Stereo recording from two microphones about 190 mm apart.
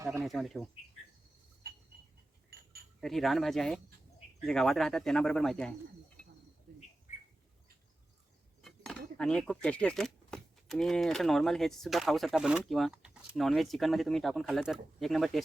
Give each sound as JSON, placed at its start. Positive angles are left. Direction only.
{"t": 0.0, "sound": "speech", "side_deg": -15}
{"t": 0.3, "sound": "speech", "side_deg": 0}
{"t": 3.0, "sound": "speech", "side_deg": 0}
{"t": 8.6, "sound": "speech", "side_deg": 0}